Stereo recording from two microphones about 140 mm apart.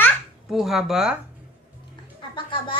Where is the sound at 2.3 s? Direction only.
35° left (ahead or behind).